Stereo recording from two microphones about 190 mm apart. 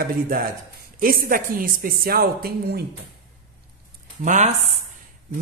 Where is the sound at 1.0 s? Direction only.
50° right (ahead or behind).